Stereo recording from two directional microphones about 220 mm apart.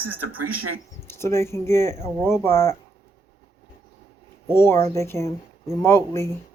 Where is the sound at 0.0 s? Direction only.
75° right (ahead or behind).